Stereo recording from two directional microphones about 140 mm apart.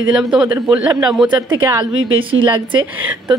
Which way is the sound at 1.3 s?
30° right (ahead or behind).